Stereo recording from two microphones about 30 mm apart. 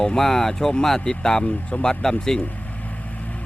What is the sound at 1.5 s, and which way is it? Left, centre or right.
Speech, left.